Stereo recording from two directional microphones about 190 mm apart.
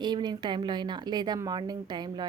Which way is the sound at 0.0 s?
25° right (ahead or behind).